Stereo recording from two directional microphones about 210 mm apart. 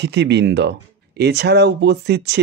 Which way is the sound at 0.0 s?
55° right (ahead or behind).